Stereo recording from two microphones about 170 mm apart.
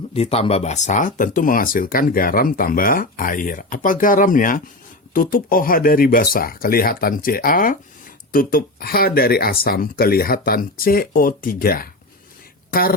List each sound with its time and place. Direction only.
0.1 s speech: 35° left (ahead or behind); by 11.9 s 60° left (ahead or behind)